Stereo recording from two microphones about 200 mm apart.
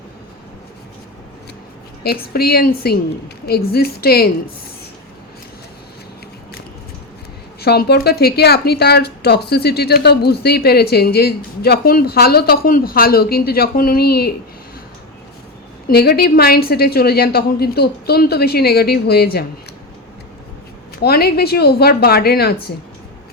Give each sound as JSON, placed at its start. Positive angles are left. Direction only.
{"t": 2.0, "sound": "a woman's voice", "side_deg": 50}
{"t": 7.6, "sound": "a woman's voice", "side_deg": 55}
{"t": 15.9, "sound": "a woman's voice", "side_deg": 50}
{"t": 21.0, "sound": "a woman's voice", "side_deg": 50}